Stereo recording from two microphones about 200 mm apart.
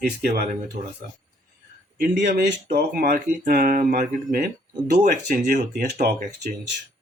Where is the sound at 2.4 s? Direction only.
50° right (ahead or behind).